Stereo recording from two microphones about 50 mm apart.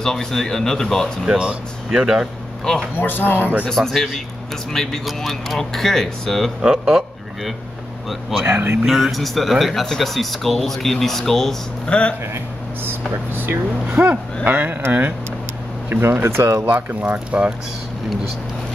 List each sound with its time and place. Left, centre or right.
0.0 s speech: centre
1.9 s speech: centre
2.7 s speech: centre
3.0 s speech: left
3.6 s speech: centre
6.6 s a man's voice: centre
8.5 s speech: right
8.8 s speech: centre
11.9 s speech: left
12.8 s speech: right
14.0 s speech: right
16.5 s speech: right